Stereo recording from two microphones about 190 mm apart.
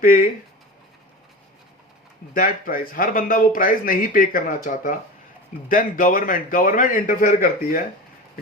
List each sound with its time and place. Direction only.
0.0 s speech: 45° left (ahead or behind)
2.3 s speech: 45° left (ahead or behind)